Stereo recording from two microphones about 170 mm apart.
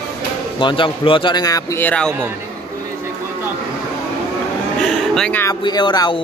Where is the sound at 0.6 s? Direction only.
30° left (ahead or behind); by 2.1 s 10° left (ahead or behind).